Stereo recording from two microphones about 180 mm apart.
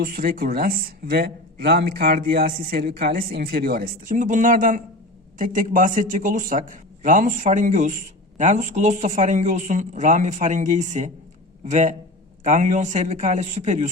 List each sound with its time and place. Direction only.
0.0 s a man's voice: 55° right (ahead or behind)